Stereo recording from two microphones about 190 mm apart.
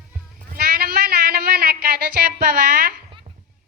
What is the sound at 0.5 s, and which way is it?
Speech, 55° right (ahead or behind).